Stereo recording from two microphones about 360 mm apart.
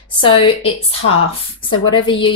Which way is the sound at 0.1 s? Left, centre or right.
Centre.